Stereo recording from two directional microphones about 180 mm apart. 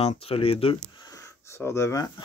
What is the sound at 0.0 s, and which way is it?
Speech, 35° left (ahead or behind).